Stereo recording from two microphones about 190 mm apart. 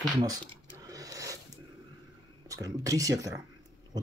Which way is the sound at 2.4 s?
15° right (ahead or behind).